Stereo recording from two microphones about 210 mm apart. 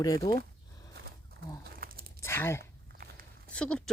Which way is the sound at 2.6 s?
45° right (ahead or behind).